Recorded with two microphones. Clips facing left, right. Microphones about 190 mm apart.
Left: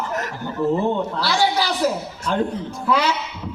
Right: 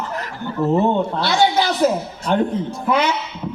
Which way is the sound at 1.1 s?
20° right (ahead or behind).